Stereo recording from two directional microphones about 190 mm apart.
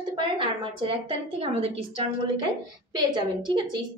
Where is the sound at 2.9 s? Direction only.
25° right (ahead or behind).